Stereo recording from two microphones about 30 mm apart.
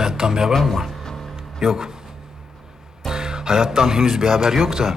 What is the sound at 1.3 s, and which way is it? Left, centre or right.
Music, centre.